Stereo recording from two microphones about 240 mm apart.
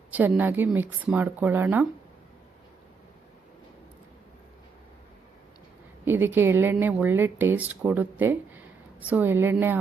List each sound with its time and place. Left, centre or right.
0.1 s speech: centre
6.1 s speech: centre